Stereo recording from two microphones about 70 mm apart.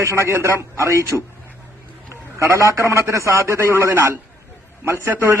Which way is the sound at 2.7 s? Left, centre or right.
Right.